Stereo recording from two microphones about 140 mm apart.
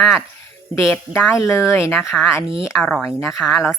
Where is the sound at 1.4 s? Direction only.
20° left (ahead or behind).